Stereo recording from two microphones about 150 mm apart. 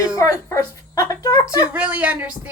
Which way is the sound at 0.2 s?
20° left (ahead or behind).